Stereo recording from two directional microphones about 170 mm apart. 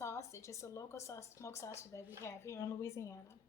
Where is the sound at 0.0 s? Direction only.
15° left (ahead or behind).